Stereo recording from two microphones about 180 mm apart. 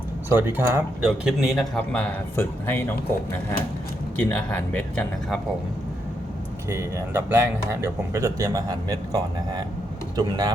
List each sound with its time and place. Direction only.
0.3 s speech: 10° right (ahead or behind); by 2.9 s 15° left (ahead or behind)
4.2 s speech: 10° left (ahead or behind)
6.7 s speech: 15° right (ahead or behind)